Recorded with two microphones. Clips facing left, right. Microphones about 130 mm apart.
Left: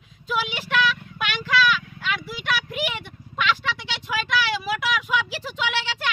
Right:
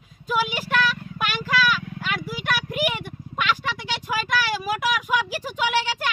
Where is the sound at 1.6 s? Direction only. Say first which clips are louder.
Left 1 dB; 45° right (ahead or behind).